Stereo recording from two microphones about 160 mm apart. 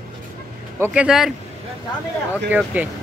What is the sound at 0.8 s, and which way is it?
Speech, 5° right (ahead or behind).